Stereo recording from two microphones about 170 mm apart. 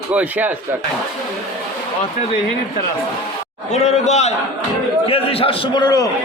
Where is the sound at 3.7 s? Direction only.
40° left (ahead or behind); by 6.1 s 25° left (ahead or behind).